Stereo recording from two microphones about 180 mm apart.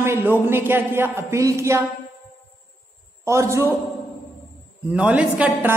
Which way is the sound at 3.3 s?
15° right (ahead or behind).